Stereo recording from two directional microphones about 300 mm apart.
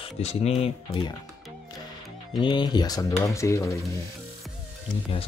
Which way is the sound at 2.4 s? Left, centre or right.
Centre.